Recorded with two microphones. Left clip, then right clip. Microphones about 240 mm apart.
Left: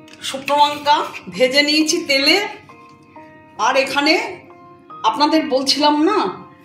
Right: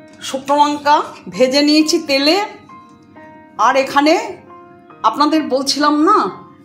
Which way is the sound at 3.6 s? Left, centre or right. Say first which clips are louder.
Right 4 dB; right.